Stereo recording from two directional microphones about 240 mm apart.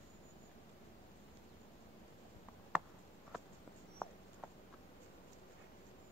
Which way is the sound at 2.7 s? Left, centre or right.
Centre.